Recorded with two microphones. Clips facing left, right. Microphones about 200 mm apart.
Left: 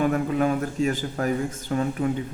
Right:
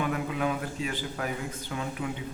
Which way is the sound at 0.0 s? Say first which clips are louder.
Left 7 dB; 45° left (ahead or behind).